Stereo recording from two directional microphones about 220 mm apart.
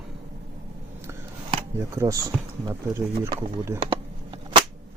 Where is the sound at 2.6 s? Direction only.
15° right (ahead or behind).